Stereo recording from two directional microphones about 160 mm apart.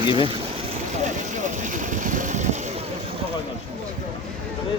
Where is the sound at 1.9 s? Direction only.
55° right (ahead or behind).